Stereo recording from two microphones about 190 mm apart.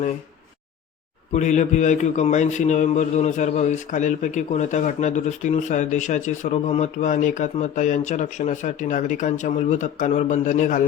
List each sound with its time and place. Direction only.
1.3 s a man's voice: 40° left (ahead or behind)